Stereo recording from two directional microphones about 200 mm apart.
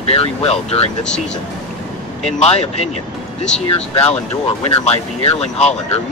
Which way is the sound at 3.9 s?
30° left (ahead or behind).